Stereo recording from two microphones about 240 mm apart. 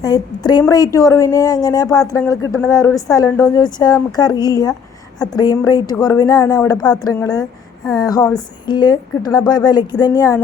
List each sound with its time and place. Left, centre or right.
0.0 s a woman's voice: centre